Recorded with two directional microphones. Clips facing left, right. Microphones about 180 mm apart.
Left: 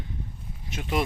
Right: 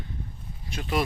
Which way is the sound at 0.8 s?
10° left (ahead or behind).